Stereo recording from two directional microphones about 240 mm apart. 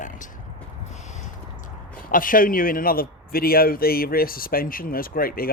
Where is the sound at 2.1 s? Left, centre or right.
Left.